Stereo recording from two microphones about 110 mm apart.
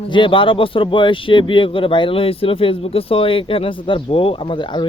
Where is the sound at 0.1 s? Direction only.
50° left (ahead or behind).